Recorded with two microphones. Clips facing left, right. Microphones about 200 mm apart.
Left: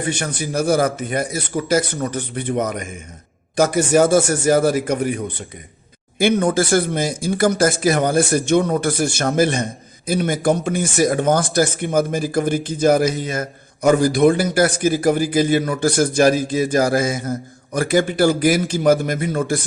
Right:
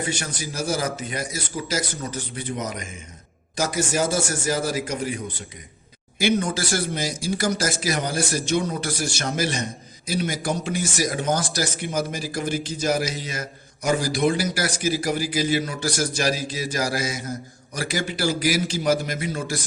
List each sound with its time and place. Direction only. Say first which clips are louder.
0.0 s a man's voice: left 5 dB; 60° left (ahead or behind)